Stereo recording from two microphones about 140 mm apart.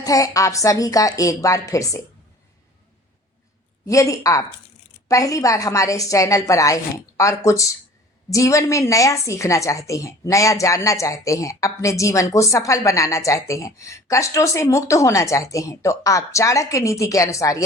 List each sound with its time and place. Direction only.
0.0 s a woman's voice: 25° left (ahead or behind)
3.8 s a woman's voice: 25° left (ahead or behind)